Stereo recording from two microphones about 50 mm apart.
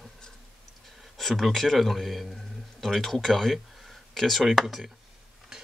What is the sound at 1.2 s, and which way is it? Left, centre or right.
A man's voice, centre.